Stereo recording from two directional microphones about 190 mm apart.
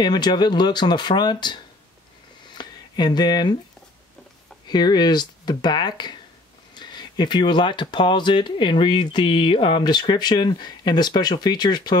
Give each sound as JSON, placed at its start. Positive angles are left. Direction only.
{"t": 0.0, "sound": "speech", "side_deg": 20}
{"t": 2.5, "sound": "a sound", "side_deg": 20}
{"t": 4.6, "sound": "speech", "side_deg": 20}